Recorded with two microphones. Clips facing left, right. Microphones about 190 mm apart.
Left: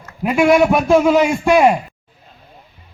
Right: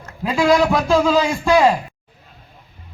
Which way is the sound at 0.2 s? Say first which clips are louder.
Left 3 dB; 20° left (ahead or behind).